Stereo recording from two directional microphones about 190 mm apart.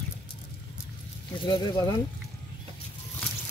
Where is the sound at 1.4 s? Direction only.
25° left (ahead or behind).